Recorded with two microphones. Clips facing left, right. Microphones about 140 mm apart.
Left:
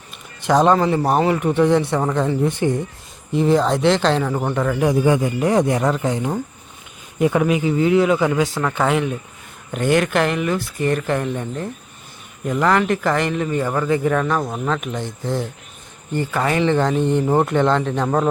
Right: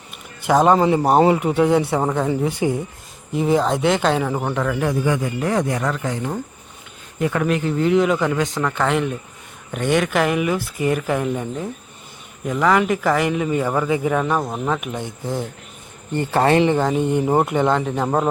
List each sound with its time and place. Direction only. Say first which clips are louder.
0.4 s speech: even; 5° right (ahead or behind)
5.0 s speech: left 4 dB; 25° left (ahead or behind)
7.4 s speech: left 2 dB; 5° left (ahead or behind); by 15.4 s 10° right (ahead or behind)
16.1 s speech: right 4 dB; 20° right (ahead or behind)